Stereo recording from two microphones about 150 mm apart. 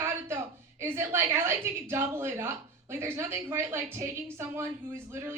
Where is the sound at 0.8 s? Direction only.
15° right (ahead or behind).